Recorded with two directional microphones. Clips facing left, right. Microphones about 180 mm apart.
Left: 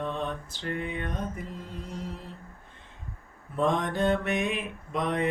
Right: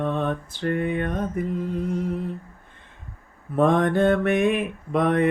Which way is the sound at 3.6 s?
55° right (ahead or behind).